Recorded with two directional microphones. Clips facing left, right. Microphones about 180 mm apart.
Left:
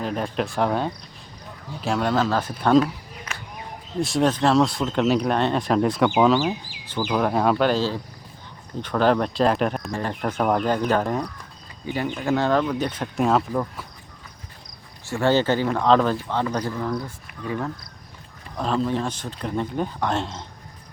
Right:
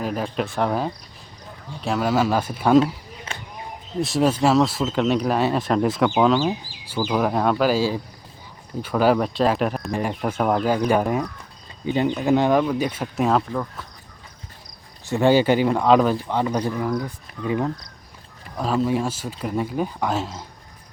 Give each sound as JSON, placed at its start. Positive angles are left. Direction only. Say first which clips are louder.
{"t": 0.0, "sound": "speech", "louder": "right 1 dB", "side_deg": -5}
{"t": 2.8, "sound": "a sound", "louder": "right 2 dB", "side_deg": -25}
{"t": 4.0, "sound": "speech", "louder": "right 1 dB", "side_deg": -5}
{"t": 6.7, "sound": "chicken", "louder": "left 1 dB", "side_deg": 20}
{"t": 7.1, "sound": "speech", "louder": "even", "side_deg": -5}
{"t": 9.9, "sound": "speech", "louder": "right 2 dB", "side_deg": -10}
{"t": 13.5, "sound": "speech", "louder": "left 2 dB", "side_deg": 10}
{"t": 15.0, "sound": "speech", "louder": "right 3 dB", "side_deg": -15}
{"t": 18.5, "sound": "speech", "louder": "right 2 dB", "side_deg": -5}